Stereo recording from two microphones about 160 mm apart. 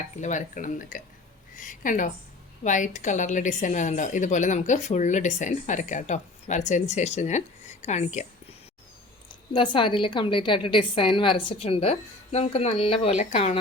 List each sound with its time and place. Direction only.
0.2 s speech: 50° left (ahead or behind)
9.5 s a woman's voice: 30° left (ahead or behind)